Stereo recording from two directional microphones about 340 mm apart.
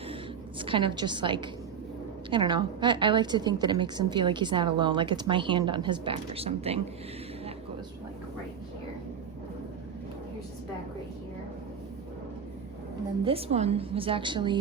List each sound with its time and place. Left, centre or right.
0.6 s a woman's voice: centre
13.2 s a woman's voice: centre